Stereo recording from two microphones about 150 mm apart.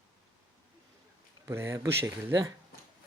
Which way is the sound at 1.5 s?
15° right (ahead or behind).